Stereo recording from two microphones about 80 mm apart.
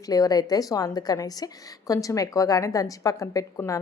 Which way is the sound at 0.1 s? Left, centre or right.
Left.